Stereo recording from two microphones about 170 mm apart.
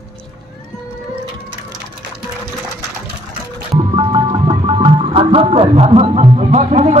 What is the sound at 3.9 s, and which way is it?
Music, 30° right (ahead or behind).